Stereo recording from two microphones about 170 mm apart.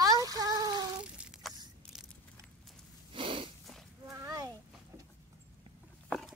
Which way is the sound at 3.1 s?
30° right (ahead or behind).